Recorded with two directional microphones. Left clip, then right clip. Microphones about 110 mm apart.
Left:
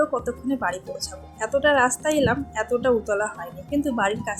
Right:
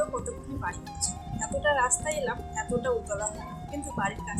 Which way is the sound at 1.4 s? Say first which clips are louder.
Left 7 dB; 55° left (ahead or behind).